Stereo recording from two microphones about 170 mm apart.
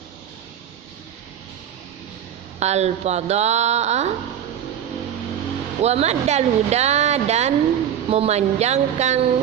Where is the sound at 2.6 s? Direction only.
40° right (ahead or behind).